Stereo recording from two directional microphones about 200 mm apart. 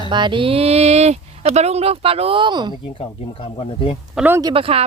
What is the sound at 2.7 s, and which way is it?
Speech, 25° left (ahead or behind).